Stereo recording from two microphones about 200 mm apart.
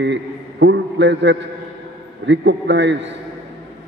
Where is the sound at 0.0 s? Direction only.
60° right (ahead or behind).